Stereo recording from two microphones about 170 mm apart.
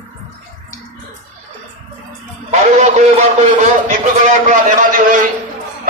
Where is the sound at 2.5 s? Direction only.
40° right (ahead or behind).